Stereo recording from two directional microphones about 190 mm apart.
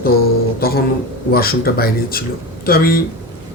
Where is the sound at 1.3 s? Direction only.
50° left (ahead or behind).